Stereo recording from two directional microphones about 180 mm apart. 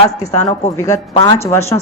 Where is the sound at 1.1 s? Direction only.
20° left (ahead or behind).